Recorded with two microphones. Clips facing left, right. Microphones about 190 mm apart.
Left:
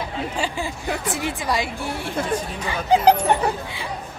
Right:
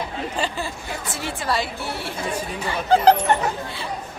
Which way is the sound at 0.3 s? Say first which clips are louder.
Right 1 dB; 10° left (ahead or behind).